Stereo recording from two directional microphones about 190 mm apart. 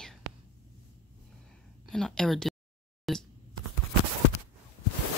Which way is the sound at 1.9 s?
5° left (ahead or behind).